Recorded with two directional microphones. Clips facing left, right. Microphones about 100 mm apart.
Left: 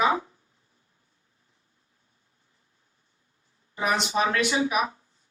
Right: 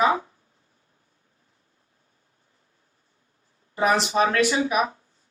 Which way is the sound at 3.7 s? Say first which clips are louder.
Right 4 dB; 35° right (ahead or behind).